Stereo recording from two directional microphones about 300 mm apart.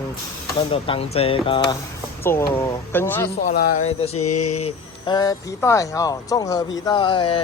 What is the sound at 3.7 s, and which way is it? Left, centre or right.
Mantra, left.